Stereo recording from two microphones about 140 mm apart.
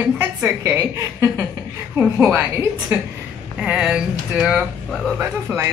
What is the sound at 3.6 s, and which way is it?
Speech, 5° right (ahead or behind).